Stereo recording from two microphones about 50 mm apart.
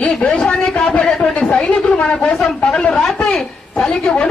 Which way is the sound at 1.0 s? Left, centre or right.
Centre.